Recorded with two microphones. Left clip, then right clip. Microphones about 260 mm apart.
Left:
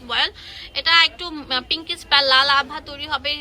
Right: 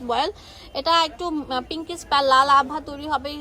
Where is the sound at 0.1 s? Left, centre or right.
Right.